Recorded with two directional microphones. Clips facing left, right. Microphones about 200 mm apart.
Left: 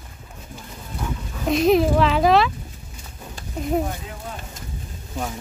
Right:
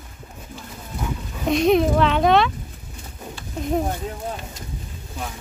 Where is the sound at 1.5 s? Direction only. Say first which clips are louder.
Even; centre (ahead or behind).